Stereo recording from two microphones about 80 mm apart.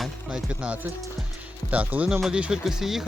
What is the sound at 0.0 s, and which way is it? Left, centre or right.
Music, centre.